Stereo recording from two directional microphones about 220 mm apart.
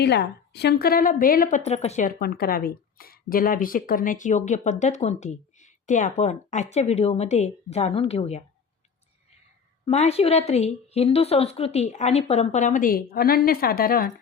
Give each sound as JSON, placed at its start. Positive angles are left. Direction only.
{"t": 0.0, "sound": "a woman's voice", "side_deg": 50}
{"t": 9.8, "sound": "a woman's voice", "side_deg": 30}